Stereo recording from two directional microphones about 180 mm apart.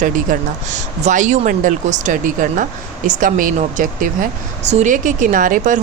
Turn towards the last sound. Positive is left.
turn(degrees=-45)  # may be behind; listen again after turning